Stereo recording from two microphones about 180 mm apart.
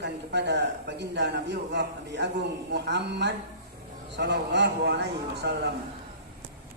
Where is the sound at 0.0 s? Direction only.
70° right (ahead or behind).